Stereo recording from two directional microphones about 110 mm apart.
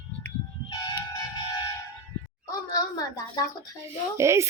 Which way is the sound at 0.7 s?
40° left (ahead or behind).